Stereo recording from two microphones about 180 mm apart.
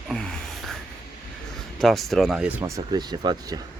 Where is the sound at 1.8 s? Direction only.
Centre (ahead or behind); by 3.6 s 25° right (ahead or behind).